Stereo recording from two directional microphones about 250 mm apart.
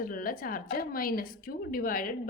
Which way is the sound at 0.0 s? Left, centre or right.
Left.